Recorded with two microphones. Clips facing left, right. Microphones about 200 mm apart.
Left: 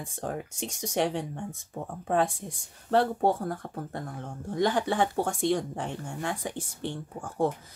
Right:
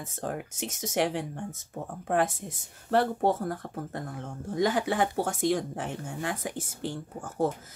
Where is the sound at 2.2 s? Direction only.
20° right (ahead or behind).